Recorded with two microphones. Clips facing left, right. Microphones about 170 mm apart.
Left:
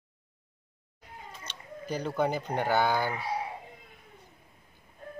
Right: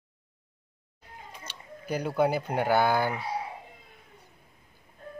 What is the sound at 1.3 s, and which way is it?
Speech, 10° right (ahead or behind).